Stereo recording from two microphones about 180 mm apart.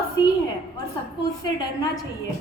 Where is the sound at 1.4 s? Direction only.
20° left (ahead or behind).